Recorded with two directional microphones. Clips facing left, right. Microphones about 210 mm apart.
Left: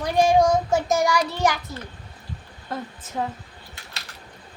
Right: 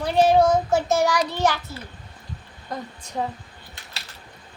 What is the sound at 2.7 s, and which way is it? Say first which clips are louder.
Speech: left 1 dB; 5° left (ahead or behind).